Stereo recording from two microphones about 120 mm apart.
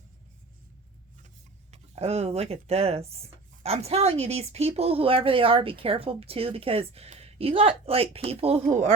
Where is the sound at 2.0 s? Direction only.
60° right (ahead or behind).